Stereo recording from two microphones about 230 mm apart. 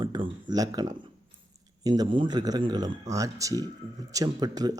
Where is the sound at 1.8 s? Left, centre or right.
Centre.